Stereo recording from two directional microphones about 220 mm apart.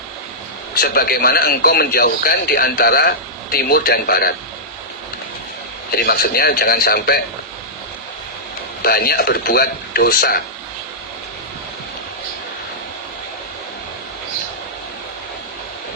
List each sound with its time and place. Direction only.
0.8 s speech: 45° left (ahead or behind)
5.9 s speech: 40° left (ahead or behind)
8.8 s speech: 45° left (ahead or behind)